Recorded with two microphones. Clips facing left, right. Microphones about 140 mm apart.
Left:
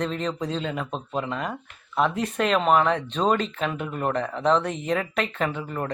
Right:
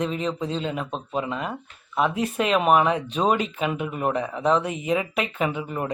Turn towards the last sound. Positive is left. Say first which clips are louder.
# right 1 dB
turn(degrees=-10)  # may be behind; listen again after turning